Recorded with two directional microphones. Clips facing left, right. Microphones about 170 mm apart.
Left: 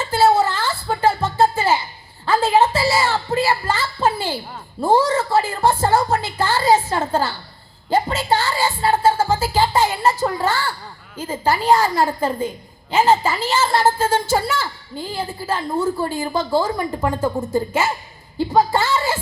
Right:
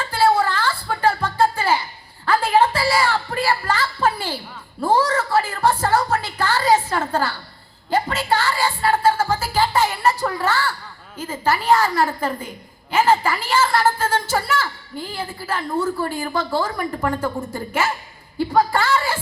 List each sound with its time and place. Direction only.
0.0 s music: 25° left (ahead or behind)
2.2 s a sound: 25° left (ahead or behind)
4.8 s a woman's voice: 25° left (ahead or behind)
7.9 s music: 25° left (ahead or behind)
11.2 s a woman's voice: 30° left (ahead or behind)